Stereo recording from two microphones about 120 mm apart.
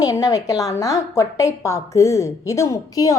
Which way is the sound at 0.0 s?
30° left (ahead or behind).